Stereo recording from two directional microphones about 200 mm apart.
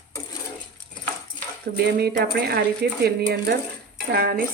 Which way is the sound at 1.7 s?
50° right (ahead or behind).